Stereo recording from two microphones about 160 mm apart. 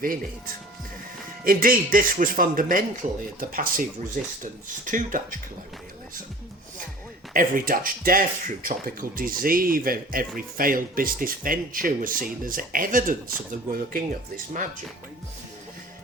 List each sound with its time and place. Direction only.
1.5 s speech: 60° right (ahead or behind)
4.9 s speech: 55° right (ahead or behind)
7.3 s speech: 60° right (ahead or behind)